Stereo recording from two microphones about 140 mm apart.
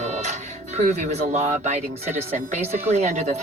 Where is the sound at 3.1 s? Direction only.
50° right (ahead or behind).